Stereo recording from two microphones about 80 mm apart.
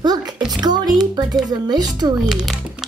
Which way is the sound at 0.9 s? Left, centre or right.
Right.